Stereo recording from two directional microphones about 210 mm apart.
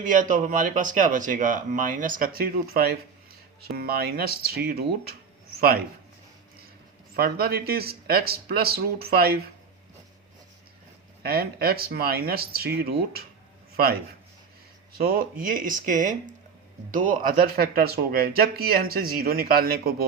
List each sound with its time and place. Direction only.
0.0 s a man's voice: 40° right (ahead or behind)
7.2 s speech: 50° right (ahead or behind)
11.2 s speech: 45° right (ahead or behind)
14.9 s speech: 45° right (ahead or behind)